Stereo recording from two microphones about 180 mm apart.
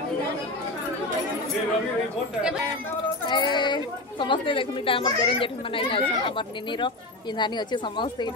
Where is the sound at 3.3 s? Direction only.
25° left (ahead or behind).